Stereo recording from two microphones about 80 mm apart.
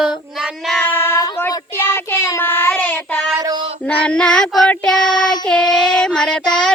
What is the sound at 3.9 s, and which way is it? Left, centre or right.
Child singing, centre.